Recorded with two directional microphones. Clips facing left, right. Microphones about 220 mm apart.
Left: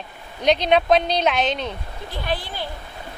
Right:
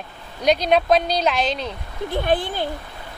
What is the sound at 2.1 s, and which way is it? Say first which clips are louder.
Speech: right 7 dB; 50° right (ahead or behind).